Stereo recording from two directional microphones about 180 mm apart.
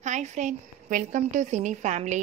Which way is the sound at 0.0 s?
40° right (ahead or behind).